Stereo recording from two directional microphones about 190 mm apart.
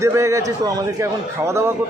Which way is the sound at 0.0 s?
15° right (ahead or behind).